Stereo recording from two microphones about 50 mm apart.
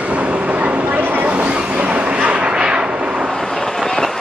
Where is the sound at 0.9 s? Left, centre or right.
Right.